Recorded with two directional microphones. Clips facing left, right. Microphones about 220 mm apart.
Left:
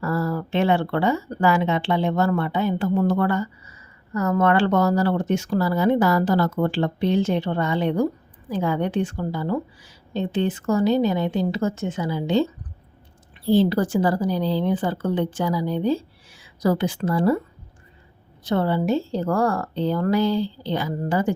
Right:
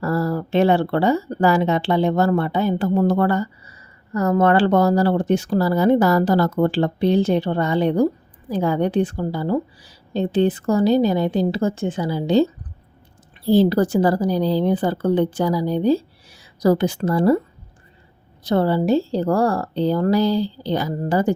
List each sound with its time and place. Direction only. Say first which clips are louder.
0.0 s speech: right 3 dB; 35° right (ahead or behind)
18.4 s speech: right 3 dB; 35° right (ahead or behind)